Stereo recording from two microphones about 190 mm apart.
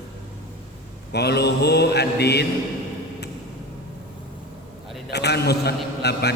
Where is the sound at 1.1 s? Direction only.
60° left (ahead or behind).